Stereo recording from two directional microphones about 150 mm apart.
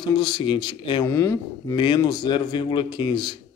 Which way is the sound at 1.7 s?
30° left (ahead or behind).